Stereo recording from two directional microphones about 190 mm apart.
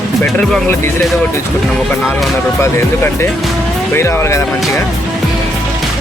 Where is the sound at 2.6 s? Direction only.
10° left (ahead or behind).